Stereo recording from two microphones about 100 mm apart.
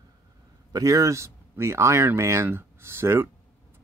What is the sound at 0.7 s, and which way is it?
Speech, 35° right (ahead or behind).